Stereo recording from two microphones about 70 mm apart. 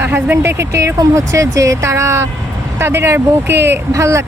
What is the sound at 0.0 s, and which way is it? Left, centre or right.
Speech, right.